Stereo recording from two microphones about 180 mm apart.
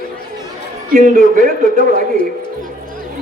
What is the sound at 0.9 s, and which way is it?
Speech, 45° right (ahead or behind).